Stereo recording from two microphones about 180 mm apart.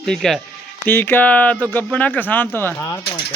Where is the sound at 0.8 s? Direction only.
10° left (ahead or behind).